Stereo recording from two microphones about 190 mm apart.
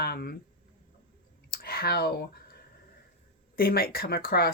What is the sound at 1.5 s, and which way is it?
Speech, 55° left (ahead or behind).